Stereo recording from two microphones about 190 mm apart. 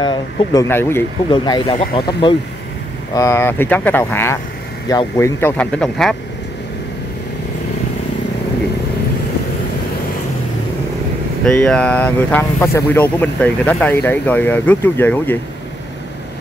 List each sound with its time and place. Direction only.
0.0 s speech: 20° left (ahead or behind)
1.3 s speech: 25° left (ahead or behind)
3.2 s speech: 15° left (ahead or behind)
11.4 s speech: 5° left (ahead or behind)